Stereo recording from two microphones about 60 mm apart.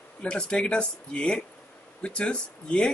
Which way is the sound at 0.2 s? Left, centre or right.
Centre.